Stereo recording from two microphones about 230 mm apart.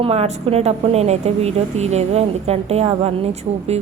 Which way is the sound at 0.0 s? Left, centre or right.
Right.